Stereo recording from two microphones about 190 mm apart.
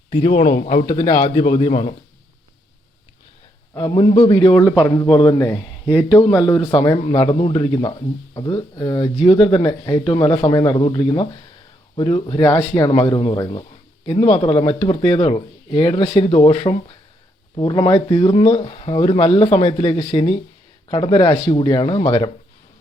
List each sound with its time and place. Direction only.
0.1 s a man's voice: 35° left (ahead or behind)
3.8 s speech: 25° left (ahead or behind)
6.4 s speech: 25° left (ahead or behind)
12.4 s speech: 20° left (ahead or behind)